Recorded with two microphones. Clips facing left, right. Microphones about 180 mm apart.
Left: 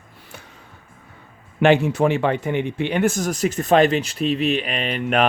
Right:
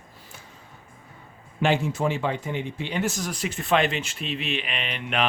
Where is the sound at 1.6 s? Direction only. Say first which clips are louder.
Left 7 dB; 65° left (ahead or behind).